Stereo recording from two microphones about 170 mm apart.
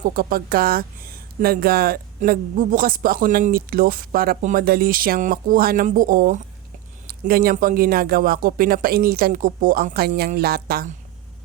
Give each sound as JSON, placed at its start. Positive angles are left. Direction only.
{"t": 0.0, "sound": "speech", "side_deg": -55}